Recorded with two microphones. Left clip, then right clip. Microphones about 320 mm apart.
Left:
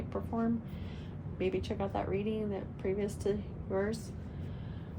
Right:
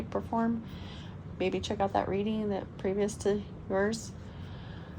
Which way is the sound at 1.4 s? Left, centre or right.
Right.